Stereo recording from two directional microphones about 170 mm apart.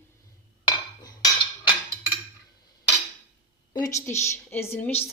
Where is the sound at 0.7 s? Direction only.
25° left (ahead or behind).